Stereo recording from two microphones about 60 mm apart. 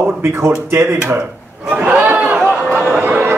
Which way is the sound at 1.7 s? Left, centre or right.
Centre.